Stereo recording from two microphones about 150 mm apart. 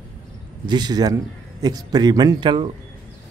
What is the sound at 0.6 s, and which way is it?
A man's voice, 30° right (ahead or behind).